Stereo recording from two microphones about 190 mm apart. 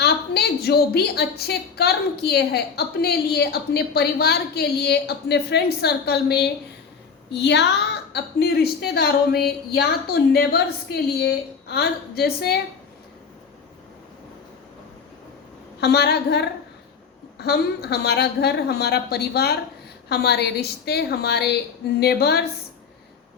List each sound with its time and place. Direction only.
0.0 s a woman's voice: 60° left (ahead or behind)
15.8 s a woman's voice: 60° left (ahead or behind)